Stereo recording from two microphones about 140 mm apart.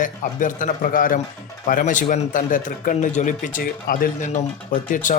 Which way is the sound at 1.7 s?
65° left (ahead or behind).